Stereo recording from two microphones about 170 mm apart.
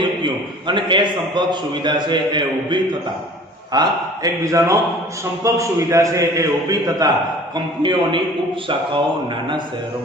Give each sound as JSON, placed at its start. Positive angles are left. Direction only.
{"t": 0.7, "sound": "a man's voice", "side_deg": -30}